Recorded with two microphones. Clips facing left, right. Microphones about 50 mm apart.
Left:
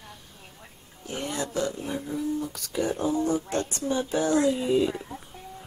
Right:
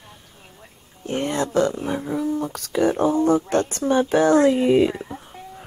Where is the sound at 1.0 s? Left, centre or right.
Right.